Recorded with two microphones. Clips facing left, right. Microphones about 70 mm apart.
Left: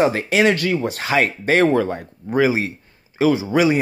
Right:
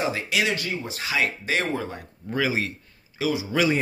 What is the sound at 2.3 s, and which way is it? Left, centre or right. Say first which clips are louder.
Speech: left 7 dB; left.